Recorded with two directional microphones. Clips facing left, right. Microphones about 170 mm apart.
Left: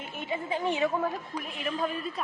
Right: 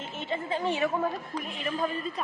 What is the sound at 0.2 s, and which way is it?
Speech, 10° left (ahead or behind).